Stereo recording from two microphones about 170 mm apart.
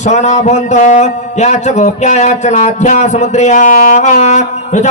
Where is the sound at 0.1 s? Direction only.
45° left (ahead or behind).